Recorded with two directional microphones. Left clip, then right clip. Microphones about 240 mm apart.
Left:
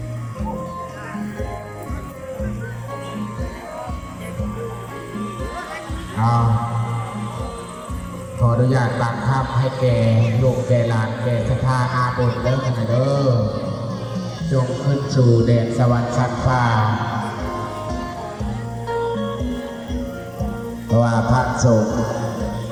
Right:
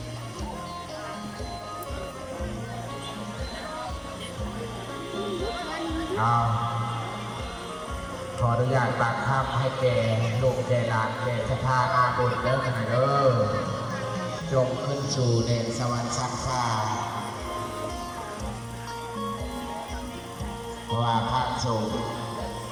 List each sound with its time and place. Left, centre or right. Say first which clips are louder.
6.1 s music: left 3 dB; left
8.4 s a man's voice: left 5 dB; left
14.5 s a sound: left 3 dB; left
20.9 s speech: left 7 dB; left